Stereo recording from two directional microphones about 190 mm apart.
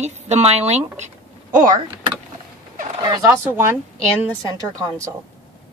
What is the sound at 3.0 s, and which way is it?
Speech, 20° right (ahead or behind).